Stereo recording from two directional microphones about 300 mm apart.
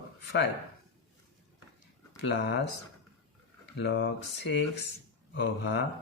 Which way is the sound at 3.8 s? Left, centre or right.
Left.